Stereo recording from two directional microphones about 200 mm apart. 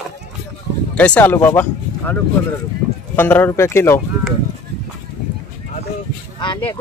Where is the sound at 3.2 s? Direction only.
10° left (ahead or behind).